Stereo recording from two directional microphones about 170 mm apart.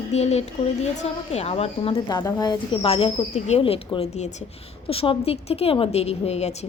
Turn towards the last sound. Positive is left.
turn(degrees=40)  # may be behind; listen again after turning